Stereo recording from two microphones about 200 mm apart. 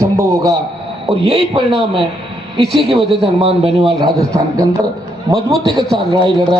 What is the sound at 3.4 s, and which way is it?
Speech, 30° right (ahead or behind).